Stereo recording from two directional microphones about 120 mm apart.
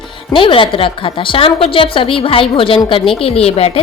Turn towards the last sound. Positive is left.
turn(degrees=55)  # may be behind; listen again after turning